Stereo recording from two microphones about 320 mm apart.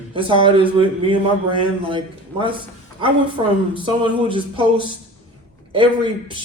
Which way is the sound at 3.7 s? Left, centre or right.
Centre.